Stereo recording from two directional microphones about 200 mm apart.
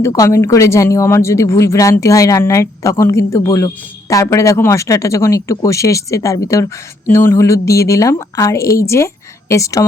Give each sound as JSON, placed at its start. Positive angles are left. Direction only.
{"t": 0.0, "sound": "speech", "side_deg": 15}